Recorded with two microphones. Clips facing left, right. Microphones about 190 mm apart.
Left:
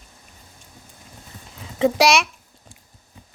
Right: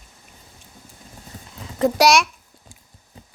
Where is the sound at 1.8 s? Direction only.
Centre (ahead or behind).